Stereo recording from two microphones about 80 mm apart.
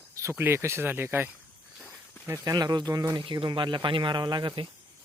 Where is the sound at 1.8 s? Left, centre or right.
Left.